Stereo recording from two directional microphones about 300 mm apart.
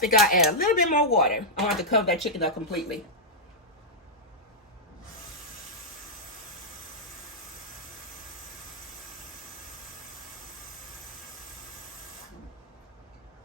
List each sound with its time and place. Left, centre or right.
0.0 s speech: left
1.7 s speech: centre